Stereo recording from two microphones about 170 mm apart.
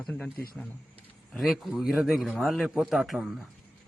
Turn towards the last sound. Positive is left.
turn(degrees=-5)  # may be behind; listen again after turning